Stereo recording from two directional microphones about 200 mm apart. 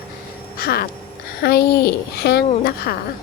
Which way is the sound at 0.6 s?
50° left (ahead or behind).